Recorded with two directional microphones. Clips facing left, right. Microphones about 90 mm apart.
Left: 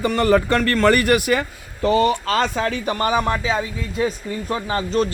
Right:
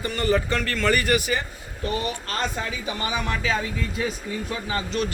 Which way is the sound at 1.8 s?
85° left.